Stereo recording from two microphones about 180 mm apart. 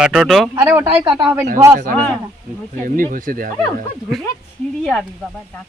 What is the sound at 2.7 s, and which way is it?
Speech, 50° right (ahead or behind).